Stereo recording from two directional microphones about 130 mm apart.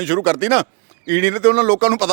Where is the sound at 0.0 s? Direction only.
20° right (ahead or behind).